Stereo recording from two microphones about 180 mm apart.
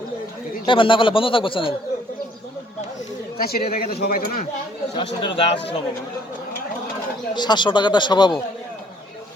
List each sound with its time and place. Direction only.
0.6 s a man's voice: 25° left (ahead or behind)
3.3 s speech: 60° left (ahead or behind)
4.9 s a man's voice: 30° left (ahead or behind)
7.3 s a man's voice: 25° left (ahead or behind)